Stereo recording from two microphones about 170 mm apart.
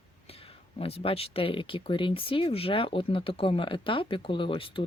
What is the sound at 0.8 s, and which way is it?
Speech, 35° left (ahead or behind).